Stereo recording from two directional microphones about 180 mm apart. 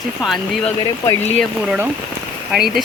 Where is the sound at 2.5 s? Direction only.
Centre (ahead or behind).